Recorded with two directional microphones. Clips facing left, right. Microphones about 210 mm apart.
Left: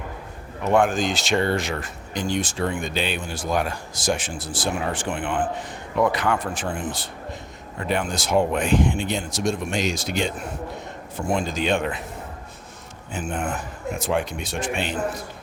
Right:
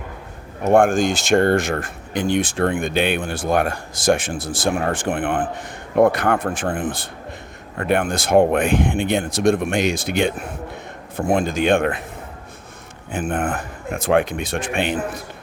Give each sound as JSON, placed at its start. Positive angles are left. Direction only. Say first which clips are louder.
{"t": 0.6, "sound": "speech", "louder": "right 5 dB", "side_deg": -50}
{"t": 13.1, "sound": "speech", "louder": "right 5 dB", "side_deg": -55}